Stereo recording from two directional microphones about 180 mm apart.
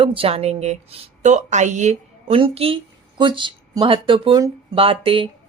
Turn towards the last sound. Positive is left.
turn(degrees=-30)  # may be behind; listen again after turning